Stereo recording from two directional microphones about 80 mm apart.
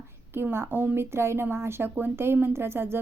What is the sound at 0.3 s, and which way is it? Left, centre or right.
A woman's voice, right.